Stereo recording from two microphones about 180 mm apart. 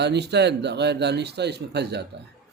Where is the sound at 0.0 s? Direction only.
70° right (ahead or behind).